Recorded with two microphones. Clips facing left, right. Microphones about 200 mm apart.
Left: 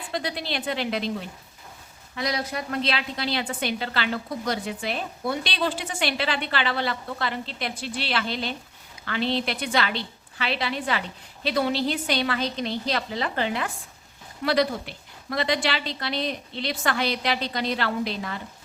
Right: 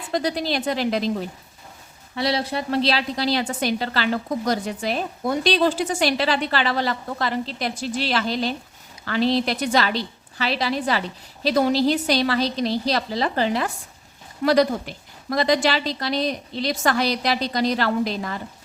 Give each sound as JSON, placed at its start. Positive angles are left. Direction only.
{"t": 0.1, "sound": "a woman's voice", "side_deg": -40}